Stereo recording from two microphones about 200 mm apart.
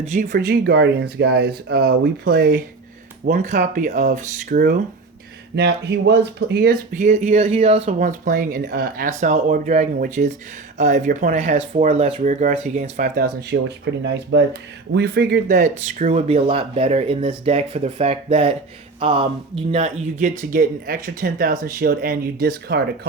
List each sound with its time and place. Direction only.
0.0 s speech: 40° right (ahead or behind)
3.2 s speech: 40° right (ahead or behind)
5.5 s speech: 55° right (ahead or behind)